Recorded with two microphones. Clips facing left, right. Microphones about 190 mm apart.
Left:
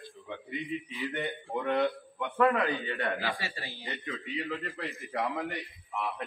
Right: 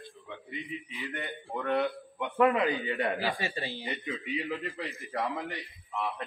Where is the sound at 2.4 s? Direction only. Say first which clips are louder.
Right 1 dB; 15° right (ahead or behind).